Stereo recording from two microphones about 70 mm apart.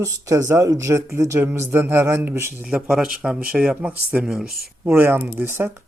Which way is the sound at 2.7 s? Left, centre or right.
Centre.